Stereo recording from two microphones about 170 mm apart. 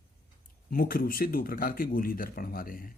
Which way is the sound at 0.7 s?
60° left (ahead or behind).